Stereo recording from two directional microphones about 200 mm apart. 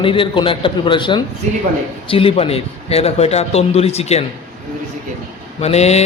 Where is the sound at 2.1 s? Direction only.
30° left (ahead or behind).